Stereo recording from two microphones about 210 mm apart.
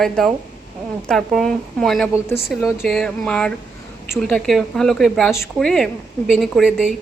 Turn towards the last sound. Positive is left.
turn(degrees=-5)  # may be behind; listen again after turning